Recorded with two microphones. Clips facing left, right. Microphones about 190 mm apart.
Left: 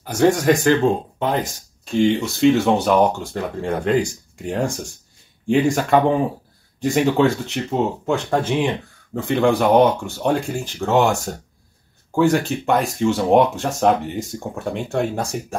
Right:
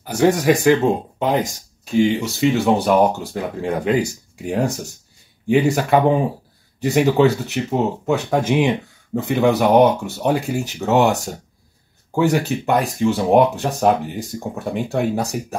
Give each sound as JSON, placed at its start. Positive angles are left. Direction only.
{"t": 0.0, "sound": "speech", "side_deg": -5}
{"t": 12.2, "sound": "speech", "side_deg": -5}